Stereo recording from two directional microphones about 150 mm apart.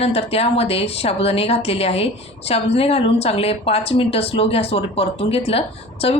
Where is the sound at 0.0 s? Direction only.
40° left (ahead or behind).